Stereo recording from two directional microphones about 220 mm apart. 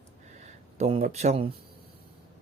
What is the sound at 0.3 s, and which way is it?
Speech, 30° right (ahead or behind).